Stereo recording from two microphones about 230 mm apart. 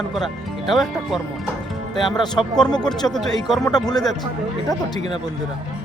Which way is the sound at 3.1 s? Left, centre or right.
Centre.